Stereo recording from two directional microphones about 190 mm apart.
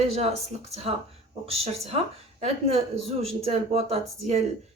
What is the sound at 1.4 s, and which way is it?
Speech, 30° right (ahead or behind).